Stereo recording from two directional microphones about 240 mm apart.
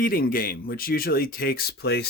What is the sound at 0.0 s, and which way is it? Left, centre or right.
Speech, left.